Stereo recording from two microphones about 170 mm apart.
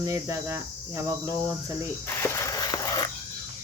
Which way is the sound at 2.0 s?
15° left (ahead or behind).